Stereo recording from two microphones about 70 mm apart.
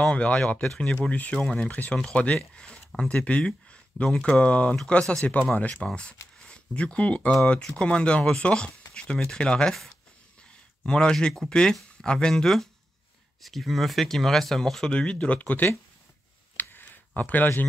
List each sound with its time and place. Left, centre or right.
0.0 s speech: centre
1.0 s speech: centre
5.2 s speech: left
10.9 s speech: centre
16.5 s a sound: left